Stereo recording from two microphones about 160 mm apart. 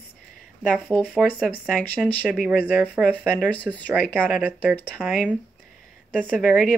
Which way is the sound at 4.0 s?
10° left (ahead or behind).